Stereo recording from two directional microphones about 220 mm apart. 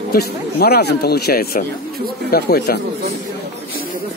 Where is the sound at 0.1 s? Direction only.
45° left (ahead or behind).